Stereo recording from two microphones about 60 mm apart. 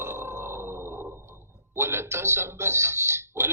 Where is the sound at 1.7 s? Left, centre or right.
Right.